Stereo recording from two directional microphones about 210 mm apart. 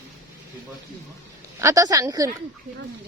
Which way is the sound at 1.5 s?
15° right (ahead or behind).